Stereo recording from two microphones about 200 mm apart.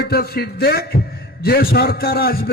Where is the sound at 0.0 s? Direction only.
50° left (ahead or behind).